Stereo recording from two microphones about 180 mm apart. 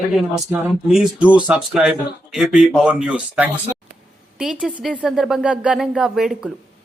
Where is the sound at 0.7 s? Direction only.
Centre (ahead or behind).